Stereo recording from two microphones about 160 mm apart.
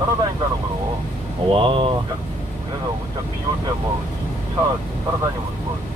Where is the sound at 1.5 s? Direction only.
30° right (ahead or behind).